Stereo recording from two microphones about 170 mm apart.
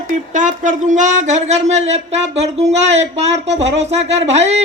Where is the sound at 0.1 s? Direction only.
50° right (ahead or behind).